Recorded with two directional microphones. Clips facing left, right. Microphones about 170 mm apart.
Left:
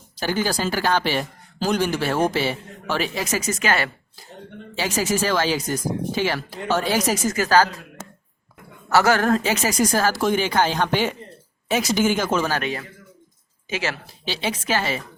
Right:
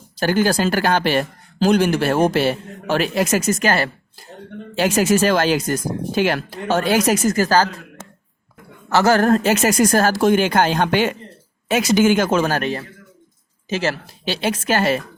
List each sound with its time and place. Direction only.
0.2 s speech: 55° right (ahead or behind)
4.8 s speech: 65° right (ahead or behind)
7.3 s speech: 35° right (ahead or behind)
9.0 s speech: 35° right (ahead or behind)
9.6 s speech: 55° right (ahead or behind); by 14.0 s 40° right (ahead or behind)
14.3 s speech: 60° right (ahead or behind)